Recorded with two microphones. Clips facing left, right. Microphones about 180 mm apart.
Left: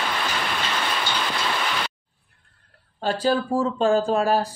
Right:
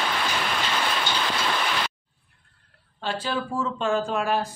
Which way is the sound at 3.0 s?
40° left (ahead or behind).